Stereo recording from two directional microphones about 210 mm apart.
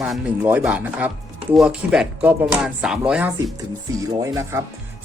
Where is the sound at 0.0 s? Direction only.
5° right (ahead or behind).